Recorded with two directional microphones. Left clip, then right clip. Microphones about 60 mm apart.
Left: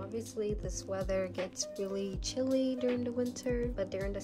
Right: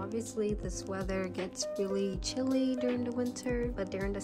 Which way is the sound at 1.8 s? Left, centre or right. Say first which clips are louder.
Right 3 dB; left.